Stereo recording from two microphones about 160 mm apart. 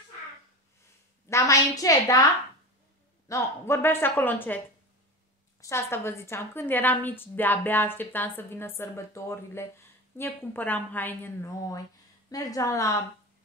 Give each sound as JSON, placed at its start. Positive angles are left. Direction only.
{"t": 1.3, "sound": "a woman's voice", "side_deg": 20}
{"t": 3.3, "sound": "a woman's voice", "side_deg": 15}
{"t": 5.6, "sound": "a woman's voice", "side_deg": 15}